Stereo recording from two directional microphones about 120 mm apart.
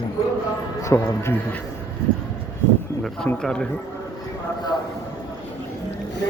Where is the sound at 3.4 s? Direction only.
5° left (ahead or behind).